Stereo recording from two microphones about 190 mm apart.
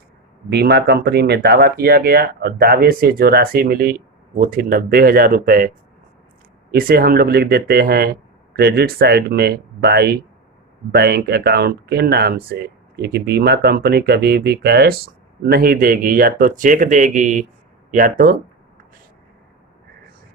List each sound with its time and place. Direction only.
0.5 s speech: 60° right (ahead or behind)